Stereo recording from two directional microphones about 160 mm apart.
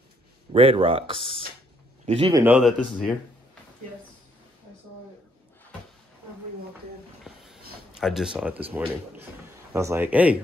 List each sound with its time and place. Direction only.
0.5 s speech: 35° right (ahead or behind)
2.3 s speech: 10° right (ahead or behind)
2.6 s speech: 5° left (ahead or behind)
7.2 s a sound: centre (ahead or behind)
8.0 s a man's voice: 5° right (ahead or behind)